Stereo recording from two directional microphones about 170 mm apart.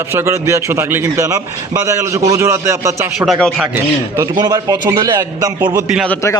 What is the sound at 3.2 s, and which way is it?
Speech, centre (ahead or behind).